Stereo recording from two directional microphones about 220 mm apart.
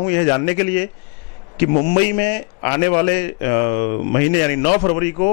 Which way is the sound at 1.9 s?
15° left (ahead or behind).